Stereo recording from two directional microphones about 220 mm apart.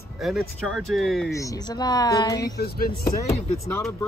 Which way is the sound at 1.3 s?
15° left (ahead or behind).